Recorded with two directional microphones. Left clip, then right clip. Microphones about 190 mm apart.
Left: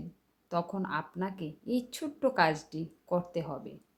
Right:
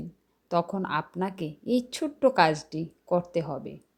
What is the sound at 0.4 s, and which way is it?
A woman's voice, 25° right (ahead or behind).